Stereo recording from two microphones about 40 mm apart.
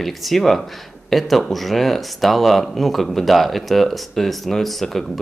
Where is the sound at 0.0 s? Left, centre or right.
Centre.